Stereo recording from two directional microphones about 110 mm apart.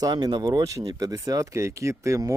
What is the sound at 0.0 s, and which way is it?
Speech, 35° right (ahead or behind).